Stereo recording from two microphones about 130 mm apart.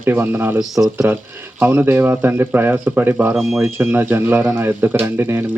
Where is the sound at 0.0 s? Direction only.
15° right (ahead or behind).